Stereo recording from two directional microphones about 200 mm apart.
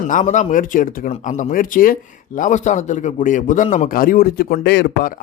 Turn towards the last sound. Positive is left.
turn(degrees=55)  # may be behind; listen again after turning